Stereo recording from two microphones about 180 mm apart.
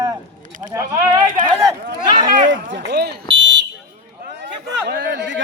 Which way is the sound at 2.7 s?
70° right (ahead or behind).